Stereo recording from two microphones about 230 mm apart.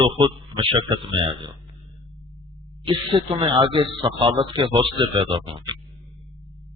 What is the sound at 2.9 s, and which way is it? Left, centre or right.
A man's voice, right.